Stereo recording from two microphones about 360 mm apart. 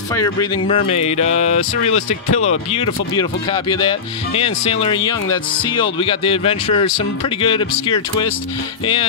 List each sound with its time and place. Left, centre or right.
0.1 s speech: centre